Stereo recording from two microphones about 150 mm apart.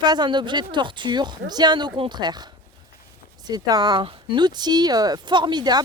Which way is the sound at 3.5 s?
25° right (ahead or behind).